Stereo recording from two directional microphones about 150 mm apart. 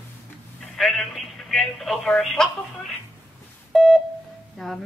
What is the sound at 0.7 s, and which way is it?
A woman's voice, centre (ahead or behind).